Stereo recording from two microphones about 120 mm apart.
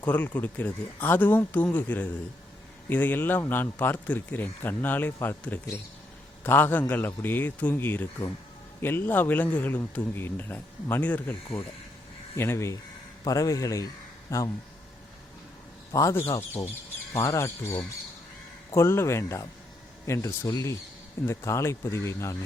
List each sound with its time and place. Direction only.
0.0 s speech: 10° left (ahead or behind); by 14.5 s 30° left (ahead or behind)
15.9 s speech: 25° left (ahead or behind)